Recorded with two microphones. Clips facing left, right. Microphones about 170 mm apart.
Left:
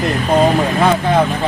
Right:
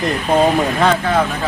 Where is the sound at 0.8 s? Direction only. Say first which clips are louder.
Left 4 dB; 15° left (ahead or behind).